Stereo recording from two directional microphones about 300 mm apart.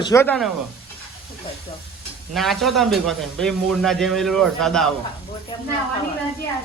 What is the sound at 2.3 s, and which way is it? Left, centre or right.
A man's voice, centre.